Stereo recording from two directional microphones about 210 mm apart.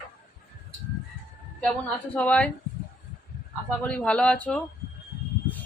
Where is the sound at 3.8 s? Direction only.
5° left (ahead or behind).